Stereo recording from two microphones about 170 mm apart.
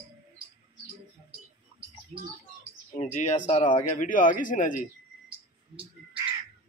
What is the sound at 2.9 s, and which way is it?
Speech, 45° left (ahead or behind).